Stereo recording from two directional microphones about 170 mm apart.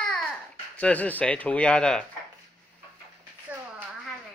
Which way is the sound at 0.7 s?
10° left (ahead or behind).